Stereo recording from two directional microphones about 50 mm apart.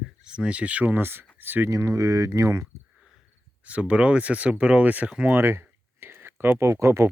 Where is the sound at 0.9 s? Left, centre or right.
Right.